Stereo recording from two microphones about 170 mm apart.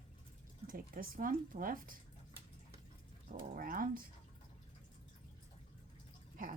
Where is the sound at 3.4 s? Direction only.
55° right (ahead or behind).